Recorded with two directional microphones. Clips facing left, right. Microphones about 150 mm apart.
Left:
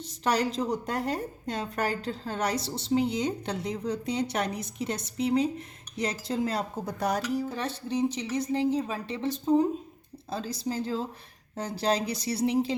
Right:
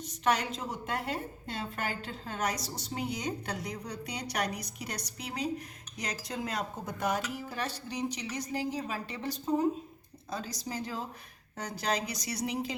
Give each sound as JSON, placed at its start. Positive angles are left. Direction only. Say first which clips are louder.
{"t": 0.0, "sound": "a woman's voice", "louder": "left 3 dB", "side_deg": 35}